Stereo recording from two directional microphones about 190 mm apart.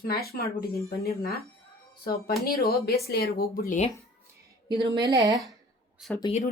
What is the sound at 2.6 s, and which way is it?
Speech, 55° left (ahead or behind).